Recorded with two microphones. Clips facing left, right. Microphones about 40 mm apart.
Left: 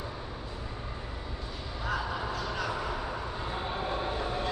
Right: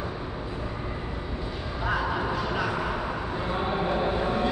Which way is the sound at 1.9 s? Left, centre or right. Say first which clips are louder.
Right 6 dB; centre.